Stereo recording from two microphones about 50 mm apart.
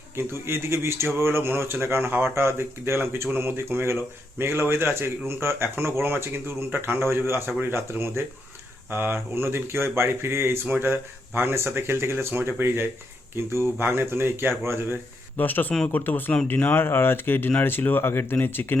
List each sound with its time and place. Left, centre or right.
0.2 s speech: right
10.8 s speech: right
15.4 s speech: left